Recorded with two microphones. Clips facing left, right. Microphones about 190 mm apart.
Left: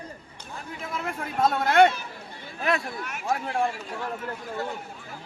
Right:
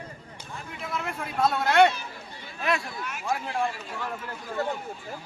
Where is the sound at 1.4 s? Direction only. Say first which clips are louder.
Left 1 dB; 50° left (ahead or behind).